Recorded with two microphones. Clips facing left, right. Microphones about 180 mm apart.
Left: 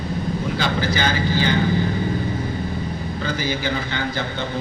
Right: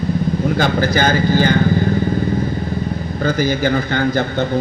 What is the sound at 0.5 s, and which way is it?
Speech, 50° right (ahead or behind).